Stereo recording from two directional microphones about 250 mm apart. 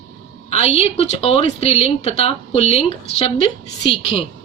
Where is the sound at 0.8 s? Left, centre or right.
Left.